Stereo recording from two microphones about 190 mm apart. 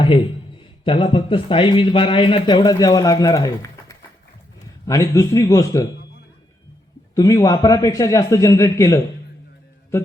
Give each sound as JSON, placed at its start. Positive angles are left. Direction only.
{"t": 0.9, "sound": "a man's voice", "side_deg": 25}
{"t": 7.2, "sound": "a man's voice", "side_deg": 20}